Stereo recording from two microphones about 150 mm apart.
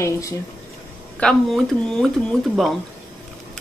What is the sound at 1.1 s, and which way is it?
Speech, 5° left (ahead or behind).